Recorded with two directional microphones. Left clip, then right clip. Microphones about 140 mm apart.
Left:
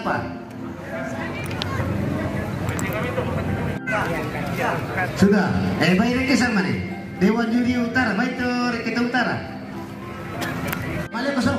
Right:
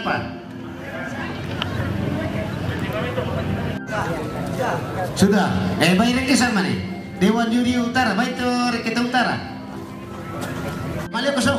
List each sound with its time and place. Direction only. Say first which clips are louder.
5.2 s speech: right 2 dB; 45° right (ahead or behind)
11.1 s speech: right 4 dB; 30° right (ahead or behind)